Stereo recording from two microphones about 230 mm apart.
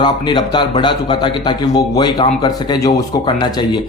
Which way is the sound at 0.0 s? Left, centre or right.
Centre.